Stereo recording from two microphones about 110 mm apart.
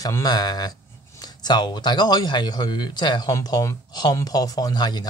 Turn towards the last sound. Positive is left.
turn(degrees=40)  # may be behind; listen again after turning